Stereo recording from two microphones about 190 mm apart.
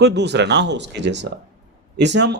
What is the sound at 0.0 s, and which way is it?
Speech, 65° right (ahead or behind).